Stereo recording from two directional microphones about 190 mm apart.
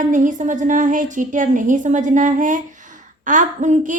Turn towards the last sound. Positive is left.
turn(degrees=-40)  # may be behind; listen again after turning